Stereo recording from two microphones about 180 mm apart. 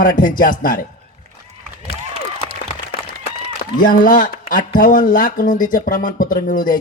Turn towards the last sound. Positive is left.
turn(degrees=50)  # may be behind; listen again after turning